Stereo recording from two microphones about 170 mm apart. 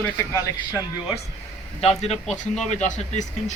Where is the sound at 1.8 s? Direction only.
40° left (ahead or behind).